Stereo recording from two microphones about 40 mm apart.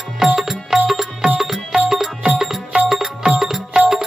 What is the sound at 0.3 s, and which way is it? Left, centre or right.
Music, centre.